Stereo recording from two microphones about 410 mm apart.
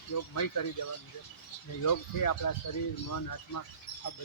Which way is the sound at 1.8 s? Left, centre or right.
Left.